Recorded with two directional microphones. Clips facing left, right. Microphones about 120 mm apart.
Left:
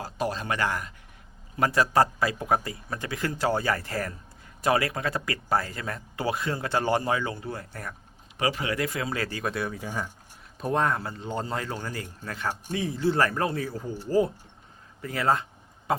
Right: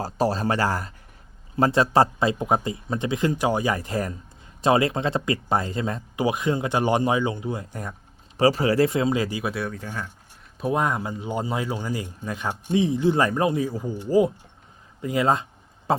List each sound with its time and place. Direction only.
0.0 s speech: 35° right (ahead or behind); by 7.9 s 20° right (ahead or behind)
8.4 s speech: 35° right (ahead or behind); by 9.7 s centre (ahead or behind)
9.7 s speech: 10° left (ahead or behind)
10.6 s speech: 10° right (ahead or behind)
15.9 s a sound: 30° right (ahead or behind)